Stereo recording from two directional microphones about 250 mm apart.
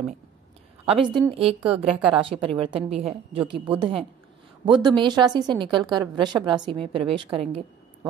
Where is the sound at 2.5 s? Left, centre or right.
Right.